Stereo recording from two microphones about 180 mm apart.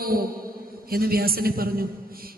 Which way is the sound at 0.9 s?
55° right (ahead or behind).